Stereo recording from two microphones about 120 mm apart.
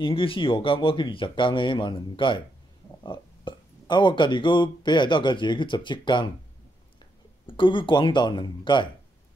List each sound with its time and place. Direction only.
0.0 s speech: 45° left (ahead or behind)
7.4 s speech: 45° left (ahead or behind)